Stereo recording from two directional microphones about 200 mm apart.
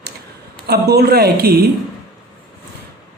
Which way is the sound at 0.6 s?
55° right (ahead or behind).